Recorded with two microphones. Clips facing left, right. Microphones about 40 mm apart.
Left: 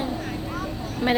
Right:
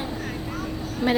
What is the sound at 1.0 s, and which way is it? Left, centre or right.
Speech, left.